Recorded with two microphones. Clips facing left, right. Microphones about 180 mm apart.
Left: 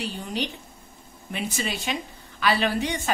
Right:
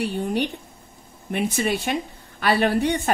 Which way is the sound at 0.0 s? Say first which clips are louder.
Right 6 dB; 60° right (ahead or behind).